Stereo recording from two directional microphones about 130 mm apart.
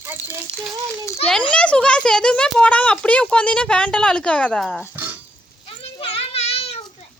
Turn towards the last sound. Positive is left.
turn(degrees=55)  # may be behind; listen again after turning